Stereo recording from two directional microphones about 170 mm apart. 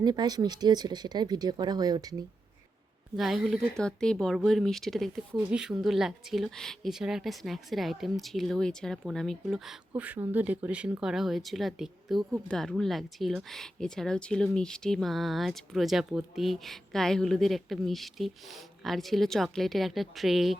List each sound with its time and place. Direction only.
0.0 s speech: 25° right (ahead or behind)
3.2 s speech: centre (ahead or behind)
9.9 s speech: 10° right (ahead or behind)